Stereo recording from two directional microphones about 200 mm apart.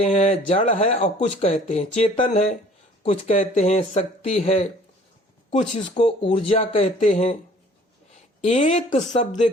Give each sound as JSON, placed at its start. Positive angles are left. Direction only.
{"t": 0.0, "sound": "speech", "side_deg": 30}
{"t": 2.0, "sound": "speech", "side_deg": 30}
{"t": 2.2, "sound": "speech", "side_deg": 40}
{"t": 8.4, "sound": "speech", "side_deg": 35}